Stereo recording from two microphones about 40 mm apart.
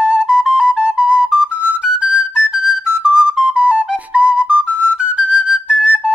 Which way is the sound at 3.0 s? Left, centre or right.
Right.